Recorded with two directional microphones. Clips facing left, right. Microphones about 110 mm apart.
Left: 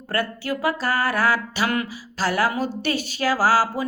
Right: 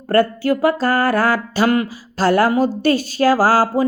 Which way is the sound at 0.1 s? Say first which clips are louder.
Right 10 dB; 45° right (ahead or behind).